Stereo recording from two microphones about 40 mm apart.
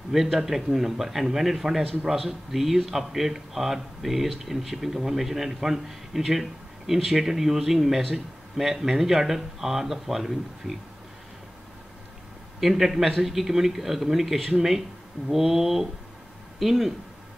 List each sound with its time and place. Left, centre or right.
0.1 s a man's voice: centre
12.5 s a man's voice: centre